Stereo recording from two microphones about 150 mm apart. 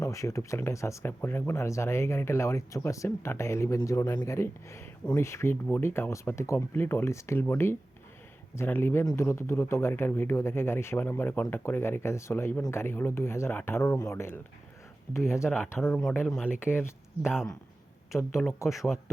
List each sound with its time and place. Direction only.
0.0 s speech: 20° left (ahead or behind)
15.4 s speech: centre (ahead or behind)
15.7 s speech: 10° left (ahead or behind)
18.7 s speech: centre (ahead or behind)